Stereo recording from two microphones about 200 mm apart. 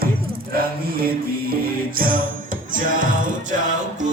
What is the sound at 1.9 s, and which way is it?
Music, 45° right (ahead or behind).